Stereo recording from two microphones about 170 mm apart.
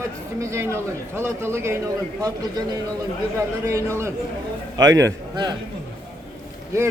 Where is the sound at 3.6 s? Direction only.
15° right (ahead or behind).